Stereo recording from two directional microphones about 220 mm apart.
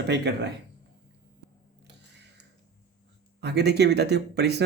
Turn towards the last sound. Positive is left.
turn(degrees=-50)  # may be behind; listen again after turning